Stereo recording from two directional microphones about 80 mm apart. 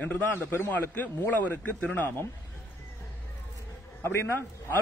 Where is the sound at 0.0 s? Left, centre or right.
Left.